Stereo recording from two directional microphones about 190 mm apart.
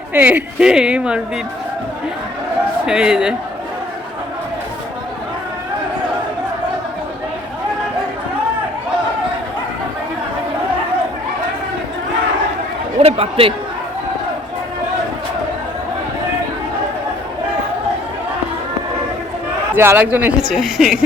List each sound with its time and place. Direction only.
0.1 s speech: 10° right (ahead or behind)
2.8 s speech: 5° right (ahead or behind)
13.0 s speech: 30° right (ahead or behind)
19.7 s a man's voice: 10° right (ahead or behind)